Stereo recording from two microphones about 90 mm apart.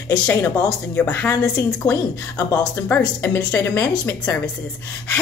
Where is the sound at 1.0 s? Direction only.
10° left (ahead or behind).